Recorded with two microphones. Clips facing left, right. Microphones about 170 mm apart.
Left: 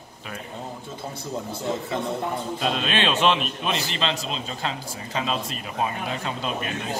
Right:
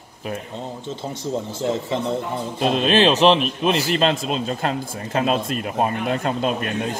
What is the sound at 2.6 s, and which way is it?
A man's voice, 45° right (ahead or behind).